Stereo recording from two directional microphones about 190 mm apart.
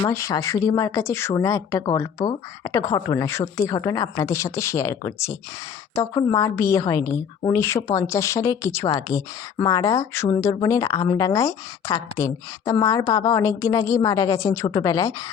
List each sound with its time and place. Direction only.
0.0 s a woman's voice: 15° left (ahead or behind)